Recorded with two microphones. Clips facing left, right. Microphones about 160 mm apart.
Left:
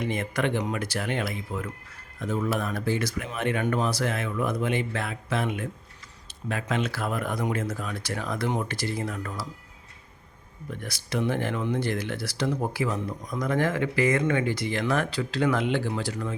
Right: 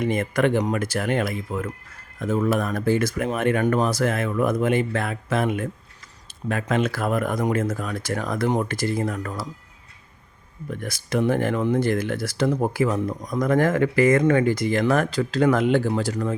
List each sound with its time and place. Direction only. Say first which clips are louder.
0.0 s speech: right 6 dB; 50° right (ahead or behind)
10.7 s speech: right 6 dB; 50° right (ahead or behind)